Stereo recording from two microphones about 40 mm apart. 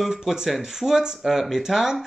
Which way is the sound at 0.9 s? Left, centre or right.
Centre.